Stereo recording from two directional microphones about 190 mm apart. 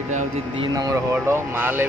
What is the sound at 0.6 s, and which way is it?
Speech, 20° right (ahead or behind).